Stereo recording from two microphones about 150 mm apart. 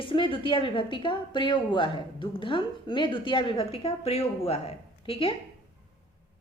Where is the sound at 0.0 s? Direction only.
35° left (ahead or behind).